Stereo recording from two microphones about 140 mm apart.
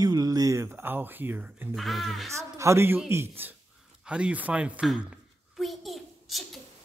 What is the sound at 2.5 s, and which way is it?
Speech, 20° right (ahead or behind).